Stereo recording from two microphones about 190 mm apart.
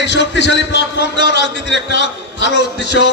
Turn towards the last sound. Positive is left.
turn(degrees=65)  # may be behind; listen again after turning